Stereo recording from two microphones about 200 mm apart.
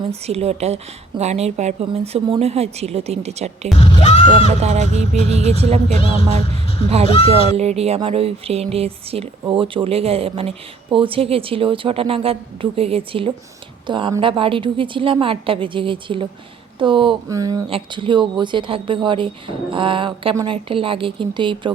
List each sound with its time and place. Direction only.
0.3 s a woman's voice: 30° right (ahead or behind)
3.8 s a sound: 35° left (ahead or behind)
4.6 s a woman's voice: 35° right (ahead or behind)